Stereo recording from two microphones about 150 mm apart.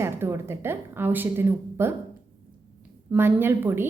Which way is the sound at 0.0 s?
15° right (ahead or behind).